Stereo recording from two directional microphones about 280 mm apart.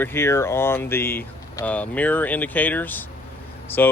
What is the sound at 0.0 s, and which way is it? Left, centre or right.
Speech, centre.